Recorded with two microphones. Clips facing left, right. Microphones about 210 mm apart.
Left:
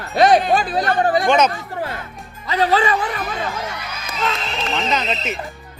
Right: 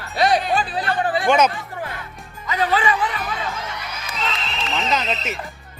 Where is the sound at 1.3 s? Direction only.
10° right (ahead or behind).